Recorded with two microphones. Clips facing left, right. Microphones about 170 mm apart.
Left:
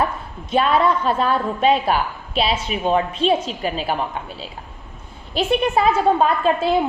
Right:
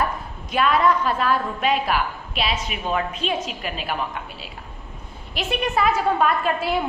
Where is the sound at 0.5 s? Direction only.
30° left (ahead or behind).